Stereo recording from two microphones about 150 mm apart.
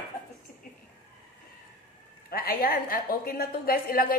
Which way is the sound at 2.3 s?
85° left.